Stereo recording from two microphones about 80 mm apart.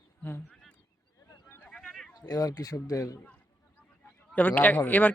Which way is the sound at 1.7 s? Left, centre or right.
Centre.